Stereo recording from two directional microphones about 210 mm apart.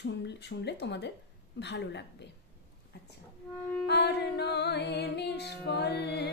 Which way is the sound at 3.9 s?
50° left (ahead or behind).